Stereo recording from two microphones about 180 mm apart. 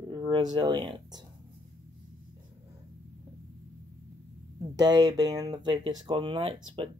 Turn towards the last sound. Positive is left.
turn(degrees=-30)  # may be behind; listen again after turning